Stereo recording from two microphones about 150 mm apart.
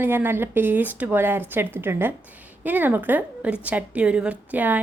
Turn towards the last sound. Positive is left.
turn(degrees=-10)  # may be behind; listen again after turning